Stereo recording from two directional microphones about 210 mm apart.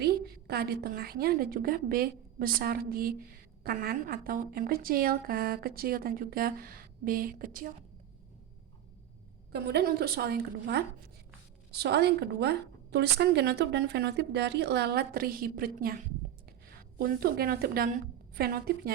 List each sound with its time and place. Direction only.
0.0 s a woman's voice: 50° right (ahead or behind)
9.5 s a woman's voice: 50° right (ahead or behind)